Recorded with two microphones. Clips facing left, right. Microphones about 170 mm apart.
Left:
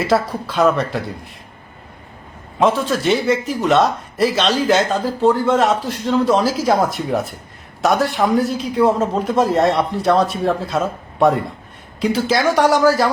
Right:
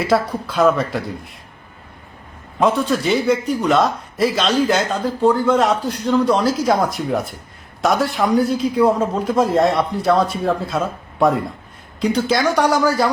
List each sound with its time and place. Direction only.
0.0 s speech: centre (ahead or behind)
2.6 s speech: centre (ahead or behind)